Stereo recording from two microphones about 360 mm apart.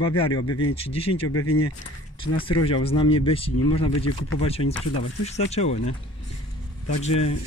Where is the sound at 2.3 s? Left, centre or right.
Centre.